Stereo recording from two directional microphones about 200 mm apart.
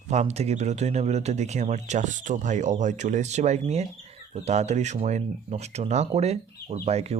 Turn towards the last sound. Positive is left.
turn(degrees=-30)  # may be behind; listen again after turning